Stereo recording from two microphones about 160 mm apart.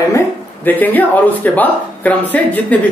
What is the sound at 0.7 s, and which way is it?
Speech, 10° left (ahead or behind).